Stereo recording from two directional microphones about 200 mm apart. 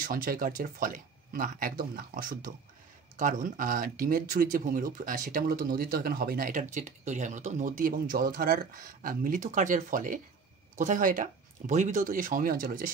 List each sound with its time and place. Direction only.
0.0 s speech: 45° right (ahead or behind)